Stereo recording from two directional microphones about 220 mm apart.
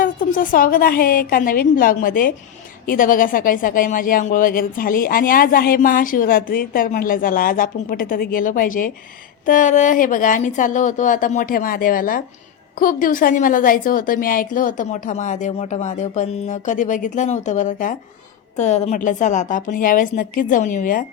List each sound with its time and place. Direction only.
0.0 s speech: 40° left (ahead or behind)